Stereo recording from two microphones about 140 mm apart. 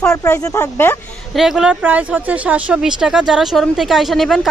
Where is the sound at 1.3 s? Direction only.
Centre (ahead or behind).